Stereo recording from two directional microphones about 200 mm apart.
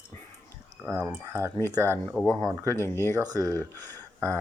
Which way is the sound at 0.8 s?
10° right (ahead or behind).